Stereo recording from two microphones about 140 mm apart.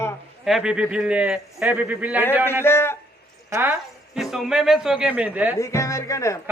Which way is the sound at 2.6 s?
15° left (ahead or behind).